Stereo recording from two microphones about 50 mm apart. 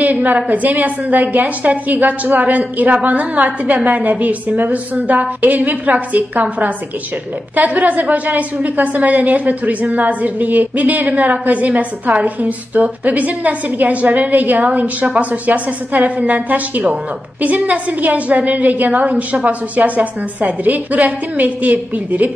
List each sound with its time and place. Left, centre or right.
0.0 s a woman's voice: right